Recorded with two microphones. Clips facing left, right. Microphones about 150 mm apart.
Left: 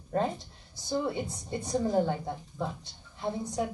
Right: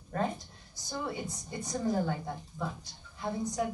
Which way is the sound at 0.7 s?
30° left (ahead or behind).